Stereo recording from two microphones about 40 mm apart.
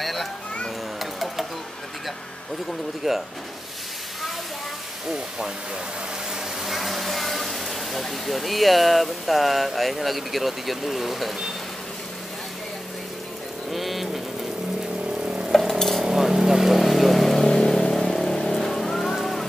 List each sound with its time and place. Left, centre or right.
0.0 s children playing: centre
3.0 s speech: centre
6.6 s speech: centre
13.7 s vehicle: centre
15.2 s stir: right
16.0 s a sound: centre
16.7 s vehicle: centre